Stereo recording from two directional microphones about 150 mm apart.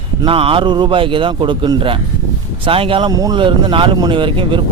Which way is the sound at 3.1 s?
25° right (ahead or behind).